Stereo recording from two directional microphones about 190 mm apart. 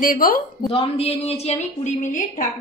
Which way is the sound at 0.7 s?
30° left (ahead or behind).